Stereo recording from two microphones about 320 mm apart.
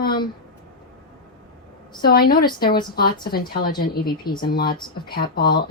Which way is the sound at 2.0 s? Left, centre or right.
Left.